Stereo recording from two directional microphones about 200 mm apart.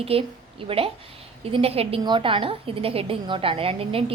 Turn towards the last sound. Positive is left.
turn(degrees=-30)  # may be behind; listen again after turning